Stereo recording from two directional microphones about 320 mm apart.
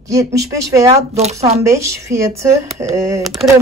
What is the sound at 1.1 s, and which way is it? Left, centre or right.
Speech, centre.